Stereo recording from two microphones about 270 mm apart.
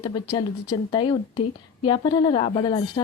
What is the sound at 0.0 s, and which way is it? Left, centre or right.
Speech, centre.